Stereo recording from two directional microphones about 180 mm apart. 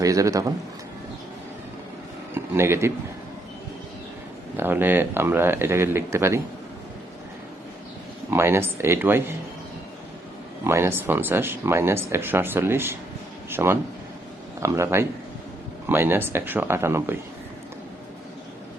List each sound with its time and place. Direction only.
0.0 s a man's voice: 20° right (ahead or behind)
2.3 s speech: 15° right (ahead or behind)
4.5 s speech: 10° right (ahead or behind)
8.3 s speech: 15° right (ahead or behind)
10.6 s speech: 15° right (ahead or behind)